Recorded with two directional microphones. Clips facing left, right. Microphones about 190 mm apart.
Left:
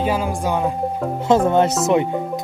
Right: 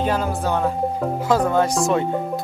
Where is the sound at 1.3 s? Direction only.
25° left (ahead or behind).